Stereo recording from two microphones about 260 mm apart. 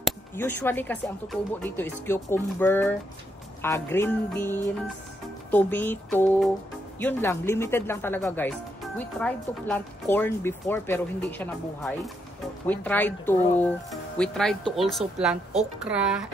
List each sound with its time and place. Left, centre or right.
0.0 s speech: centre